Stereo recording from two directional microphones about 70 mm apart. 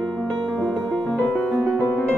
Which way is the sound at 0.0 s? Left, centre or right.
Centre.